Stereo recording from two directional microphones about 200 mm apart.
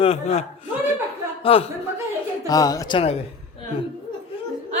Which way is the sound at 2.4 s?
20° left (ahead or behind).